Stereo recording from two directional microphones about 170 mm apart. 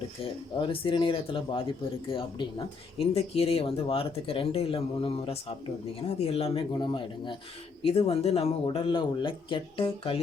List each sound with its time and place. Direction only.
0.5 s speech: 30° left (ahead or behind)